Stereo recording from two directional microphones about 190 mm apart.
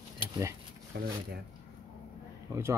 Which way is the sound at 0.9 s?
60° right (ahead or behind).